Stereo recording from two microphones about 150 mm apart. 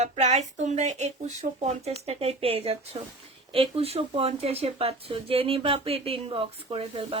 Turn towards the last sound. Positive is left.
turn(degrees=-40)  # may be behind; listen again after turning